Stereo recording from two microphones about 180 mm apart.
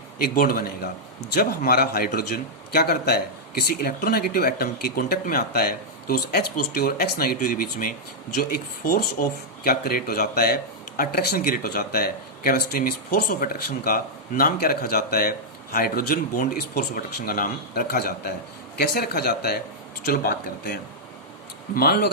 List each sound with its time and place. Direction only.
0.2 s speech: 55° left (ahead or behind)
21.8 s speech: 60° left (ahead or behind)